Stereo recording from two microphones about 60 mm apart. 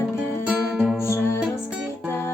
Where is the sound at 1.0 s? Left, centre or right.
Left.